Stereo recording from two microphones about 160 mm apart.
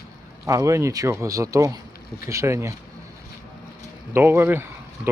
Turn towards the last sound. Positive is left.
turn(degrees=-15)  # may be behind; listen again after turning